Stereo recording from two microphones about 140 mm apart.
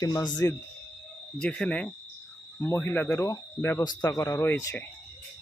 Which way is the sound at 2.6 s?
20° left (ahead or behind).